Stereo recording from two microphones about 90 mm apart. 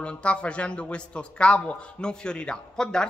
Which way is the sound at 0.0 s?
10° left (ahead or behind).